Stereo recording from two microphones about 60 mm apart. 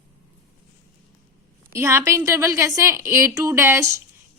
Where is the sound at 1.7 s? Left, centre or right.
Right.